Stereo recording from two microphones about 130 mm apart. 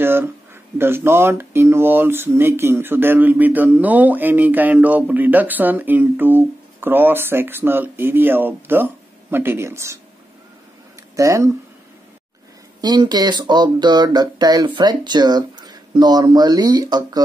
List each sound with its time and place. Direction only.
0.0 s a sound: 15° right (ahead or behind)
0.7 s speech: 20° right (ahead or behind)
11.1 s speech: 25° right (ahead or behind)
12.8 s speech: 35° right (ahead or behind)